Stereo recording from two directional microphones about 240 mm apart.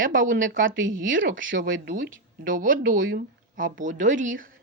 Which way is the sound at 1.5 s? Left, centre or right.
Right.